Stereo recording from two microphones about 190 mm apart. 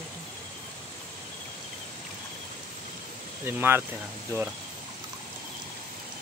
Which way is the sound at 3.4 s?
10° right (ahead or behind).